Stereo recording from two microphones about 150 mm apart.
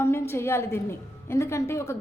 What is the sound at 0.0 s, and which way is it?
A woman's voice, 15° left (ahead or behind).